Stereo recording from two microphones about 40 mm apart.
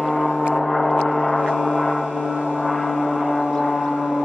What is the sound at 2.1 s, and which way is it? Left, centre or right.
Gong, right.